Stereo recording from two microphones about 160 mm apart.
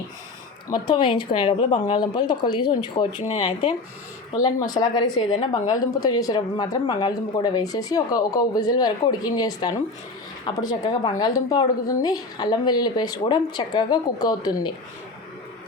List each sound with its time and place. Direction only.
0.7 s a woman's voice: 30° left (ahead or behind)